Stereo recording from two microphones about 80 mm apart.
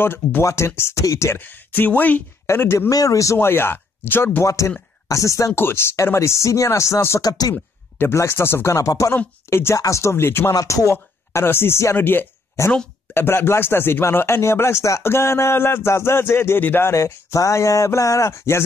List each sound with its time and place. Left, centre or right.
0.0 s speech: left
1.4 s speech: left
2.4 s speech: left
2.9 s speech: left
3.3 s speech: left
4.5 s speech: left
5.5 s speech: left
7.2 s speech: left
8.0 s speech: left
10.5 s speech: left
12.6 s speech: left